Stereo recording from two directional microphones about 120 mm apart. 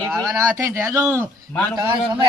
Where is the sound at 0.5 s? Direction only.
25° right (ahead or behind).